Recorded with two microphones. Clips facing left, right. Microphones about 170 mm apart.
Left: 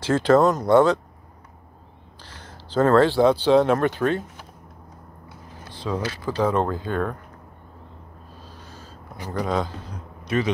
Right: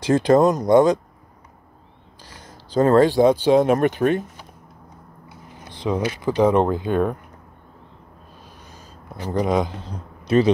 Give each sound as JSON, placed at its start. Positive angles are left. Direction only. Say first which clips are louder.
{"t": 0.0, "sound": "speech", "louder": "right 2 dB", "side_deg": -15}
{"t": 2.2, "sound": "speech", "louder": "even", "side_deg": -15}
{"t": 5.6, "sound": "speech", "louder": "right 4 dB", "side_deg": -20}
{"t": 9.3, "sound": "speech", "louder": "right 4 dB", "side_deg": -15}
{"t": 10.2, "sound": "speech", "louder": "right 7 dB", "side_deg": -30}